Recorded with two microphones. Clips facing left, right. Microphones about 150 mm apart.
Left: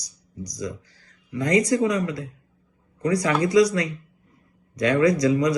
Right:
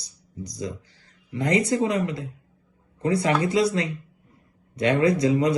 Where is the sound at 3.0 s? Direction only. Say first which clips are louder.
Even; 30° right (ahead or behind).